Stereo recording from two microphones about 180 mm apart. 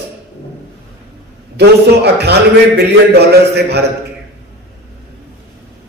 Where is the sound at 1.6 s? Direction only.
65° right (ahead or behind).